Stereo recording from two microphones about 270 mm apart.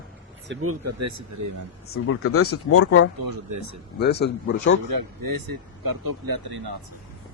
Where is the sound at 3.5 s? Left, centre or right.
Right.